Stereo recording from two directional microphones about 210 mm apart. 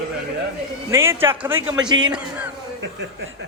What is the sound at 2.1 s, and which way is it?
Speech, 5° right (ahead or behind).